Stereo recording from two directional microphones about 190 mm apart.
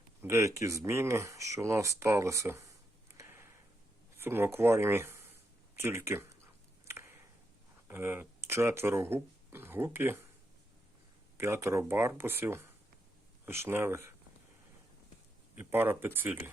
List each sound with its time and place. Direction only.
0.2 s speech: 15° right (ahead or behind)
3.2 s a sound: 15° right (ahead or behind)
4.2 s speech: 10° right (ahead or behind)
5.7 s a sound: 15° right (ahead or behind)
7.9 s speech: 10° right (ahead or behind)
11.3 s speech: 15° right (ahead or behind)
15.5 s speech: 10° right (ahead or behind)